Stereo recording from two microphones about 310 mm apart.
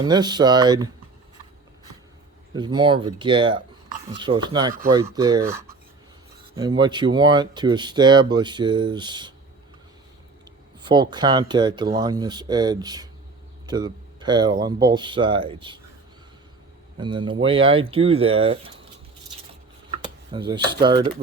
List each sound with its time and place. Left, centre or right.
0.0 s speech: centre
2.5 s speech: centre
10.8 s speech: centre
17.0 s speech: centre
19.9 s speech: centre